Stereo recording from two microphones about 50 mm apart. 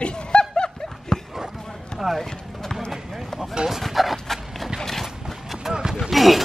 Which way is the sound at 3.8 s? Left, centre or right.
Centre.